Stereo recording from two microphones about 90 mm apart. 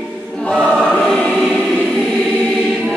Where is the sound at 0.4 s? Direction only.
10° left (ahead or behind).